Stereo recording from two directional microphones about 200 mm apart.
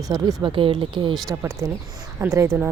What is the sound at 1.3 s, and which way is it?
A woman's voice, 15° right (ahead or behind).